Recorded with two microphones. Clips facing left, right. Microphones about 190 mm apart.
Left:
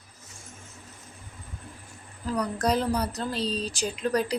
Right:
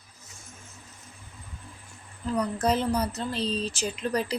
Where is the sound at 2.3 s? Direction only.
5° right (ahead or behind).